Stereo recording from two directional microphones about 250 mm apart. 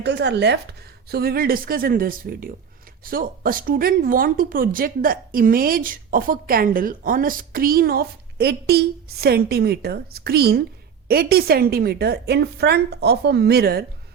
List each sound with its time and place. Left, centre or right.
0.0 s speech: right